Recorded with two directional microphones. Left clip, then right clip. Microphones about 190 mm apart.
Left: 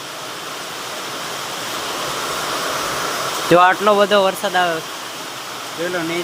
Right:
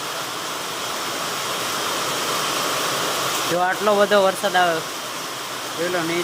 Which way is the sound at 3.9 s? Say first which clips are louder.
Left 3 dB; 15° left (ahead or behind).